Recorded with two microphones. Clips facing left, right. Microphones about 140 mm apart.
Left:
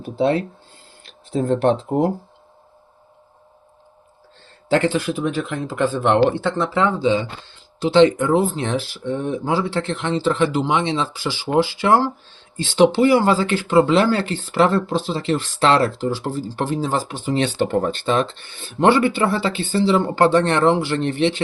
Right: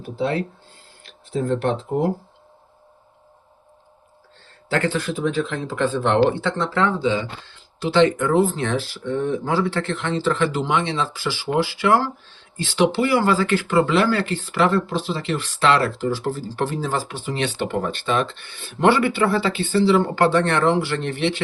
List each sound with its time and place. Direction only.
0.0 s a sound: 25° left (ahead or behind)
1.5 s speech: 25° left (ahead or behind)
4.7 s speech: 20° left (ahead or behind)